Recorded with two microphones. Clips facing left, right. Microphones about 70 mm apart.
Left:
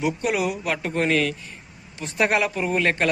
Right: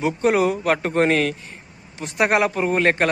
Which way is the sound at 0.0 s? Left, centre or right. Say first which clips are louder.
Right 5 dB; right.